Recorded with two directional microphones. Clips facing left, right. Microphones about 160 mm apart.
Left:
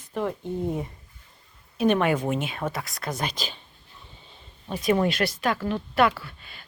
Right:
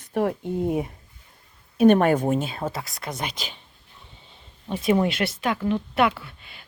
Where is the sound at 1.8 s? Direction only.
45° right (ahead or behind); by 3.5 s 20° right (ahead or behind).